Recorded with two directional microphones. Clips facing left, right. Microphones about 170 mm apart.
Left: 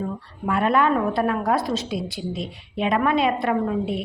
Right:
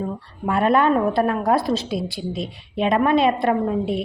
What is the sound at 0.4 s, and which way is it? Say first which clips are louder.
A woman's voice: right 2 dB; 35° right (ahead or behind).